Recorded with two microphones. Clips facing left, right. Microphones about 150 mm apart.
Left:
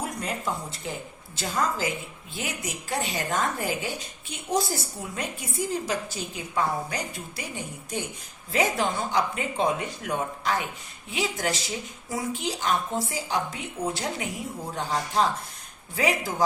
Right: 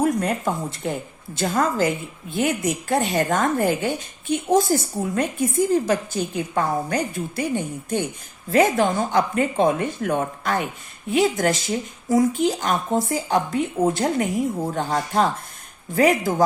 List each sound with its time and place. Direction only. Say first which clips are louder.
0.0 s a woman's voice: right 10 dB; 50° right (ahead or behind)